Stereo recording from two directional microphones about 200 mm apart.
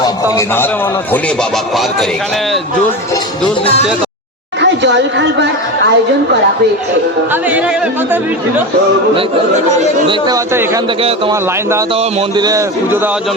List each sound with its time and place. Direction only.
0.0 s a sound: 15° left (ahead or behind)
4.6 s speech: 60° right (ahead or behind)
7.4 s a man's voice: 5° right (ahead or behind)
10.1 s a man's voice: 20° right (ahead or behind)
11.9 s a man's voice: 20° right (ahead or behind)